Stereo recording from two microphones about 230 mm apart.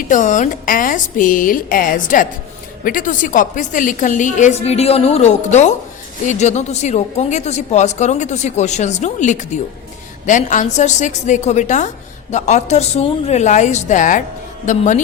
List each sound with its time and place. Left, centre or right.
0.1 s a woman's voice: left